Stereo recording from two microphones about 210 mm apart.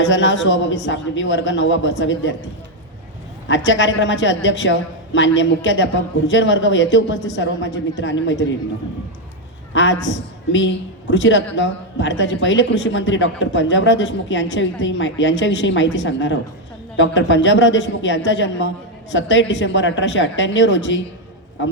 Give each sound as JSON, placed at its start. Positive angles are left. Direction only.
{"t": 0.0, "sound": "speech", "side_deg": 60}
{"t": 3.5, "sound": "speech", "side_deg": 60}
{"t": 9.7, "sound": "speech", "side_deg": 60}